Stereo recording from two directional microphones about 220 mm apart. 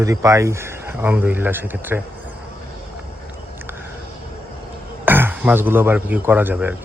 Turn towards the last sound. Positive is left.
turn(degrees=-5)  # may be behind; listen again after turning